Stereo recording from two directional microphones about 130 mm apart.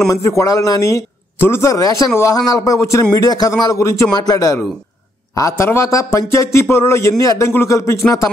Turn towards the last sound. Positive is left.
turn(degrees=20)  # may be behind; listen again after turning